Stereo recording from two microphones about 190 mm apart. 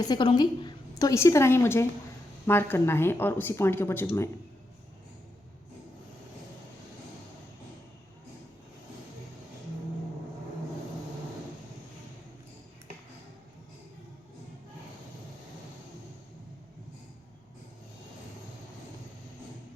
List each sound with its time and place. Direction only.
0.0 s a woman's voice: 25° left (ahead or behind)